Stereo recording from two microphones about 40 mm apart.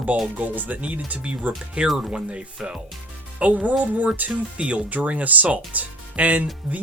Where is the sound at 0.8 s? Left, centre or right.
Right.